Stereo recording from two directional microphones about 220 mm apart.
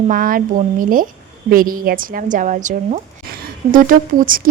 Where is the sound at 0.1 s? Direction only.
40° right (ahead or behind).